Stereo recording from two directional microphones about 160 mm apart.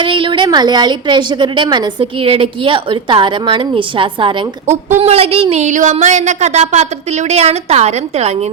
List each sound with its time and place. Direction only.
0.0 s a woman's voice: 30° right (ahead or behind)